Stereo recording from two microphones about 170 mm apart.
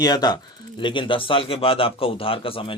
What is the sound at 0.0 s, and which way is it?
A man's voice, 25° left (ahead or behind).